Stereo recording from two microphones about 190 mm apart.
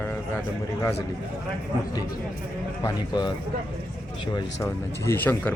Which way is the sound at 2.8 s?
20° left (ahead or behind).